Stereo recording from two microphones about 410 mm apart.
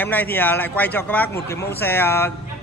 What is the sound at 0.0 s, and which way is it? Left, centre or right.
Speech, centre.